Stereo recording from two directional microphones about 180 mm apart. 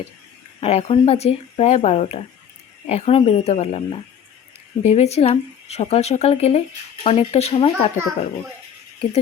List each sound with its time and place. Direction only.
0.6 s speech: 35° left (ahead or behind)